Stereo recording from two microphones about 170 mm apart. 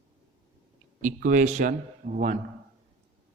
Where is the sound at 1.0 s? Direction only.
50° right (ahead or behind).